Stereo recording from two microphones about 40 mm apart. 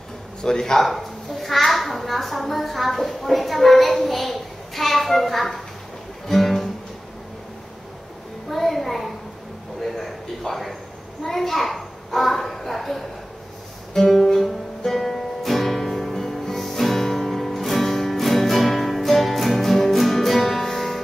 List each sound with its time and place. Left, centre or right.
0.4 s a man's voice: centre
0.8 s a child's voice: centre
6.2 s music: centre
8.5 s a sound: centre
13.9 s guitar: centre